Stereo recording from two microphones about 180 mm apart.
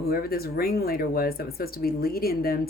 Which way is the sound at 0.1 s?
55° left (ahead or behind).